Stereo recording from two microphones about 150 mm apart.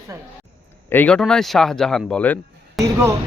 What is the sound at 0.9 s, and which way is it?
Speech, 10° left (ahead or behind).